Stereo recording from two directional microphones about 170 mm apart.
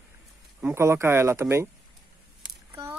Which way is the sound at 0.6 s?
10° right (ahead or behind).